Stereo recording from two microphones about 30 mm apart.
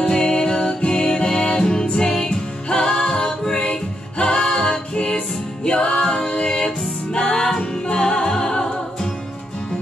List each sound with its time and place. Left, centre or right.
0.0 s music: left
4.2 s a capella: left
4.9 s music: left